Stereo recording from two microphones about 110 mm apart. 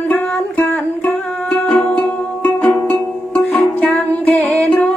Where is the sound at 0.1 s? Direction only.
15° left (ahead or behind).